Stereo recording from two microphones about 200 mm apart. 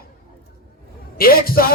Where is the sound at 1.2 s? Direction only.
50° left (ahead or behind).